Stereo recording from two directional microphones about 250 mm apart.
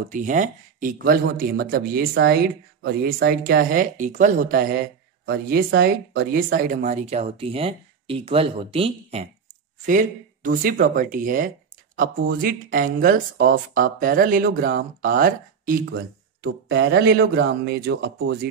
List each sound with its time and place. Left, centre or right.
0.1 s speech: right